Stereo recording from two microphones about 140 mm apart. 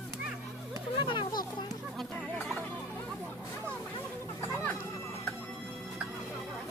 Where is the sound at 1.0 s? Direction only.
35° left (ahead or behind).